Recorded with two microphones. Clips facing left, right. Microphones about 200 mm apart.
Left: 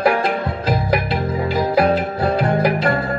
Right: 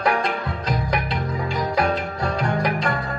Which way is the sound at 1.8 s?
35° left (ahead or behind).